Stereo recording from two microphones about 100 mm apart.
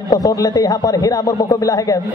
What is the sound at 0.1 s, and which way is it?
A man's voice, 40° left (ahead or behind).